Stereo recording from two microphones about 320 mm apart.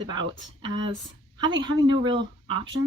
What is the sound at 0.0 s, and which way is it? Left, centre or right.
Speech, centre.